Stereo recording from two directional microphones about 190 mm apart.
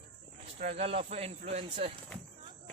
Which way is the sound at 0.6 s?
30° right (ahead or behind).